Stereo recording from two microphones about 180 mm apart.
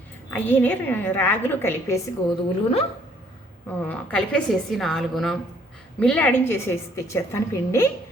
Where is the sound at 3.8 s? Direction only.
5° left (ahead or behind).